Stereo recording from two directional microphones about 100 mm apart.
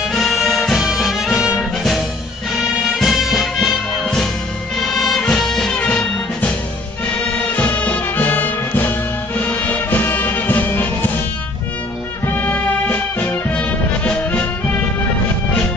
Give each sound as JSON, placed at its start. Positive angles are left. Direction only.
{"t": 0.1, "sound": "music", "side_deg": 0}
{"t": 7.5, "sound": "music", "side_deg": 15}
{"t": 12.4, "sound": "music", "side_deg": 15}